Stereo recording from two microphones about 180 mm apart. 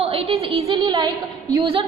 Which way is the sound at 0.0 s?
30° right (ahead or behind).